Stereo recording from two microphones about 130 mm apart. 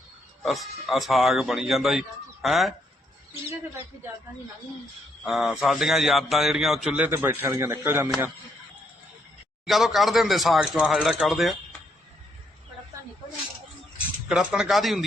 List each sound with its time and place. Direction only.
0.4 s speech: centre (ahead or behind)
5.2 s a man's voice: 5° right (ahead or behind); by 8.1 s 20° right (ahead or behind)
9.6 s speech: centre (ahead or behind)
14.3 s speech: 5° right (ahead or behind)